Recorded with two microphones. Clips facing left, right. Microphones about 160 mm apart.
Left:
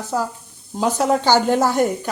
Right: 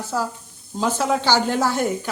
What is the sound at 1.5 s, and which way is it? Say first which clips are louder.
Speech: left 4 dB; 20° left (ahead or behind).